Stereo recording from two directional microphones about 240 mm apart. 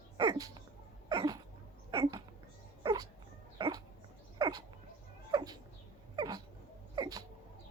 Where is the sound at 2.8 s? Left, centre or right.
Centre.